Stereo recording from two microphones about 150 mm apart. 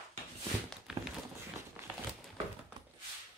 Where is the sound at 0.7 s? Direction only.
5° right (ahead or behind).